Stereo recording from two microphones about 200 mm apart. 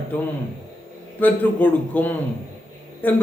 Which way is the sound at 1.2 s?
10° left (ahead or behind).